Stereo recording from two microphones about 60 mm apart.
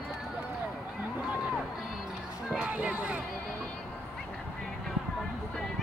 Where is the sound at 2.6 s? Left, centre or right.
Right.